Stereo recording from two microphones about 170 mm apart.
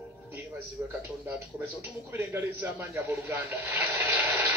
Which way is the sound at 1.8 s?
10° right (ahead or behind).